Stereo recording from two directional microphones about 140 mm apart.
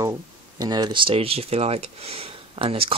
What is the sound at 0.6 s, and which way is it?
Speech, 30° right (ahead or behind).